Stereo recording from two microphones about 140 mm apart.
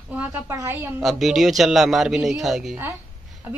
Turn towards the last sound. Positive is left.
turn(degrees=-15)  # may be behind; listen again after turning